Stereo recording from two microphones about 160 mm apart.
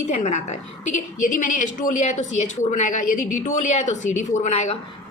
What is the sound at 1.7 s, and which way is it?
A woman's voice, 50° left (ahead or behind).